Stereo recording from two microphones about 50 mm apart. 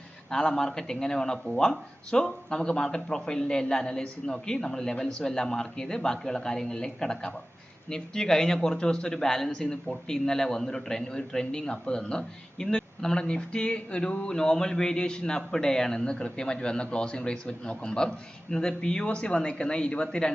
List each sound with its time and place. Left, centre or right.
0.3 s speech: centre